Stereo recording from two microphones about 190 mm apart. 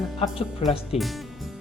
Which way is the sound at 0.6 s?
30° left (ahead or behind).